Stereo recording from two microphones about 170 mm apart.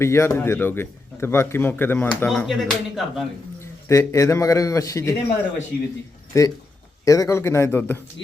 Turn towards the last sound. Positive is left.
turn(degrees=15)  # may be behind; listen again after turning